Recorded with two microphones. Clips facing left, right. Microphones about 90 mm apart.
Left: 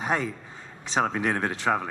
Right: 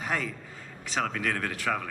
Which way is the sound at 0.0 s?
25° left (ahead or behind).